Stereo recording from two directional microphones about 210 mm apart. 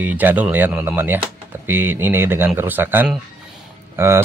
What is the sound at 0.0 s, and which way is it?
Speech, 10° right (ahead or behind).